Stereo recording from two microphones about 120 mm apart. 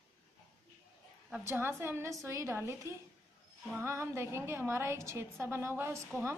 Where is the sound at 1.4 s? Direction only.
20° right (ahead or behind).